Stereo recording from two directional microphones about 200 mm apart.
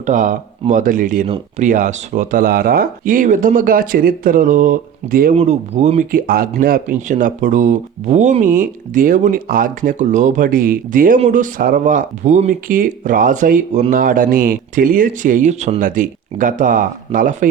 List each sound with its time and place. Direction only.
0.0 s speech: 40° right (ahead or behind)